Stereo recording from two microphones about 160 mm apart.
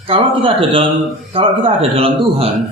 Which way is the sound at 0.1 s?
35° right (ahead or behind).